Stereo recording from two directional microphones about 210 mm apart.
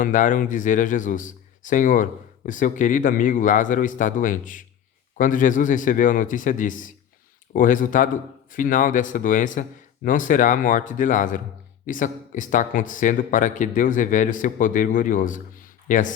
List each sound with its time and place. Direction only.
0.0 s speech: 35° left (ahead or behind)